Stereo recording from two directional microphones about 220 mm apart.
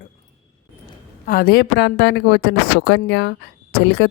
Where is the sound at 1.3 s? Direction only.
40° left (ahead or behind).